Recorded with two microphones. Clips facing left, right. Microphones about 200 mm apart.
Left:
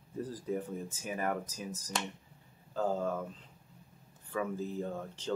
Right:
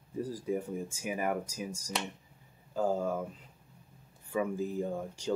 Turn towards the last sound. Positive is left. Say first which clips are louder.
# right 3 dB
turn(degrees=-10)  # may be behind; listen again after turning